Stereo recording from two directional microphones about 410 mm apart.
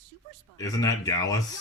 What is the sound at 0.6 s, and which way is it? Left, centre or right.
Speech, centre.